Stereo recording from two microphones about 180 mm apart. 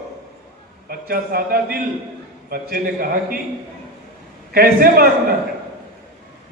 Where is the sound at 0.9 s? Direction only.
55° right (ahead or behind).